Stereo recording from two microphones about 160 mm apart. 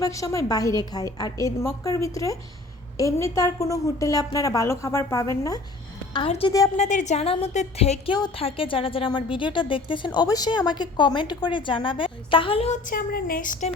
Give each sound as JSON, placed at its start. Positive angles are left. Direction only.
{"t": 0.0, "sound": "a woman's voice", "side_deg": 20}
{"t": 6.1, "sound": "a woman's voice", "side_deg": 35}
{"t": 6.7, "sound": "a woman's voice", "side_deg": 50}